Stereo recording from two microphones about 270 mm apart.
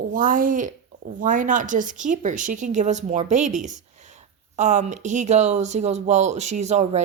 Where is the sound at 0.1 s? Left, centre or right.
Right.